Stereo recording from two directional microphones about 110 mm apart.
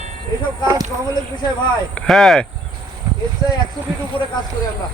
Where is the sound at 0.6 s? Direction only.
30° right (ahead or behind).